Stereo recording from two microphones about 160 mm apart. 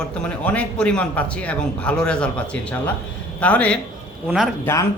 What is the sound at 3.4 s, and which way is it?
Speech, 10° left (ahead or behind).